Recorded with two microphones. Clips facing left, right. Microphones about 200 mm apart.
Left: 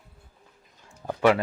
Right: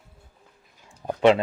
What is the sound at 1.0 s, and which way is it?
Speech, 20° right (ahead or behind).